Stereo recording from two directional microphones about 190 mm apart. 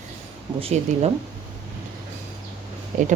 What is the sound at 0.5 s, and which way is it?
Speech, 30° right (ahead or behind).